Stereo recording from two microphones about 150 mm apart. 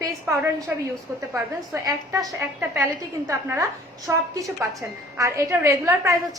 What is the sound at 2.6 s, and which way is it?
A woman's voice, 10° right (ahead or behind).